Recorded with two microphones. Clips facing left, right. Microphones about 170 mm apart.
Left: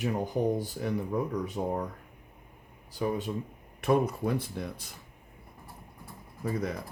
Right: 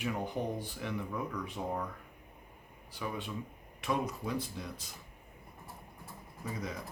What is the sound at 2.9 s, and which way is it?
Speech, 40° left (ahead or behind).